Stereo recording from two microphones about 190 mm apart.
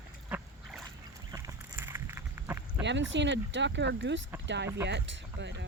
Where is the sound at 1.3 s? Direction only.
15° right (ahead or behind).